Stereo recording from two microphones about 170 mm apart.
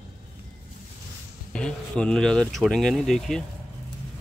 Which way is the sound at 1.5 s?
5° left (ahead or behind).